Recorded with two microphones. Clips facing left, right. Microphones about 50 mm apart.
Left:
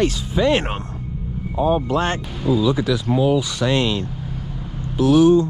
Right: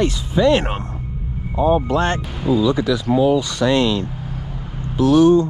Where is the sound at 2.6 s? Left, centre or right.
Centre.